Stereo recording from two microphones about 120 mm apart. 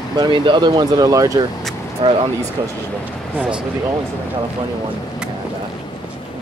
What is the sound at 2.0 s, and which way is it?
Speech, 45° right (ahead or behind).